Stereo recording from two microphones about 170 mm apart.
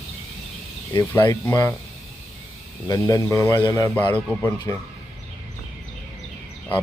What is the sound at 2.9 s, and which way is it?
A man's voice, 20° left (ahead or behind).